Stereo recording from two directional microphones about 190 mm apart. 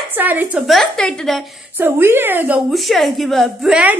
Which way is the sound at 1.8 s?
10° right (ahead or behind).